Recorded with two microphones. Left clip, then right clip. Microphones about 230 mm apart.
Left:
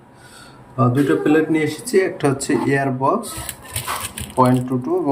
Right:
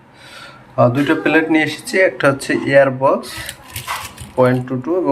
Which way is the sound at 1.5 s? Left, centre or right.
Centre.